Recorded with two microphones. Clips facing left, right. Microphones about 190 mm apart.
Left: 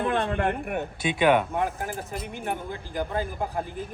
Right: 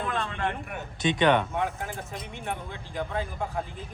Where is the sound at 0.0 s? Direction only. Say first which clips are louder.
Left 5 dB; 60° left (ahead or behind).